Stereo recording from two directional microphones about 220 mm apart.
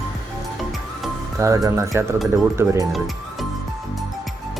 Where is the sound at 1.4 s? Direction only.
15° right (ahead or behind).